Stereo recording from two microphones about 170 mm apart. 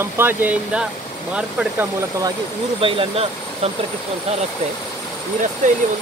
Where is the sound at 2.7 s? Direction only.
35° right (ahead or behind).